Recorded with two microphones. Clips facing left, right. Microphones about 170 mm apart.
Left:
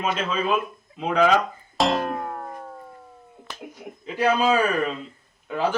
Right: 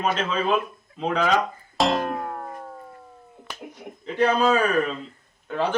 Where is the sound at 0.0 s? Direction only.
5° left (ahead or behind).